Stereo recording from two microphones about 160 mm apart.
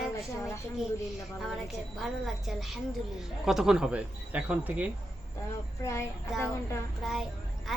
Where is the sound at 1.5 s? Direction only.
Centre (ahead or behind).